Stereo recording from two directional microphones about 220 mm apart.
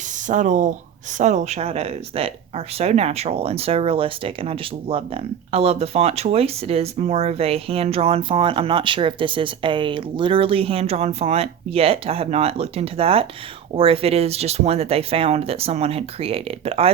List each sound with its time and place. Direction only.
0.3 s speech: 35° right (ahead or behind)